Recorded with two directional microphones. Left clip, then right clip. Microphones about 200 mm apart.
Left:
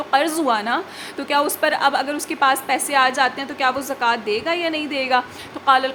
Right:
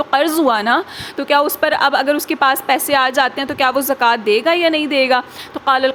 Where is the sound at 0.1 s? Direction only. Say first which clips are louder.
Right 3 dB; 25° right (ahead or behind).